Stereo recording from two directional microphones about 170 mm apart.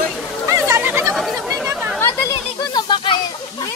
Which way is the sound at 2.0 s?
20° left (ahead or behind).